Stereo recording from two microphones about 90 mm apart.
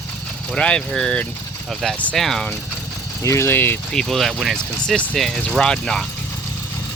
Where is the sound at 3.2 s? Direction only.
35° left (ahead or behind).